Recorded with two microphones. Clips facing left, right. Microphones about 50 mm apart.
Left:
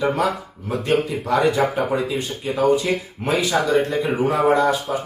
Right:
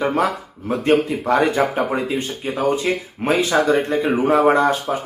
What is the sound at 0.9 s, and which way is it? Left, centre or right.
Speech, right.